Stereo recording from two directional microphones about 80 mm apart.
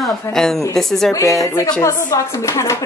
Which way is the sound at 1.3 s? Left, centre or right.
Left.